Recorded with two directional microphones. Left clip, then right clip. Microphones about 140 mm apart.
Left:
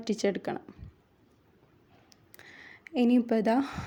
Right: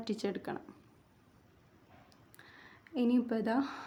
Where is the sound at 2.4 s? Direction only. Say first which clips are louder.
Left 7 dB; 50° left (ahead or behind).